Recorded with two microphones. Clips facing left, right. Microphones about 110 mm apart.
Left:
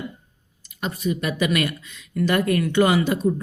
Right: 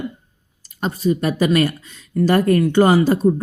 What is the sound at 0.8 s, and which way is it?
Speech, 35° right (ahead or behind).